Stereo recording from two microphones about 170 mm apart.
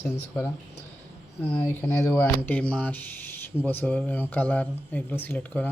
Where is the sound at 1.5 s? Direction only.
15° left (ahead or behind).